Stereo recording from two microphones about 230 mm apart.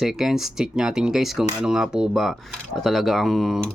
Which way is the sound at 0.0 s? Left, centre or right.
Centre.